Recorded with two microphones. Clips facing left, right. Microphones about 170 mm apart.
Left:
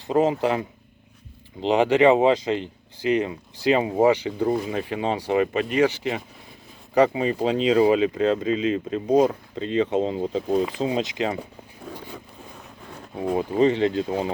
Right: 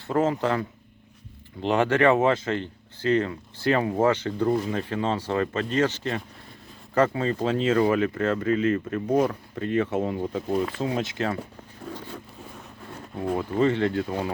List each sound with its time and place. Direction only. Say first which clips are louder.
0.1 s speech: left 3 dB; 15° left (ahead or behind)
1.6 s speech: left 3 dB; 15° left (ahead or behind)
11.9 s zipper: right 1 dB; 10° left (ahead or behind)
12.9 s speech: left 2 dB; 15° left (ahead or behind)